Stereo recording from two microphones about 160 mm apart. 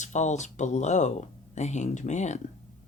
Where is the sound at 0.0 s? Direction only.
45° left (ahead or behind).